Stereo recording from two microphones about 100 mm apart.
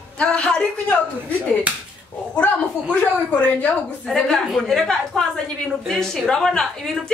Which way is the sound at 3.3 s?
15° left (ahead or behind).